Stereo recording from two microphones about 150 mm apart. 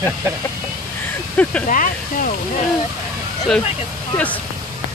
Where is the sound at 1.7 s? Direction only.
60° left (ahead or behind).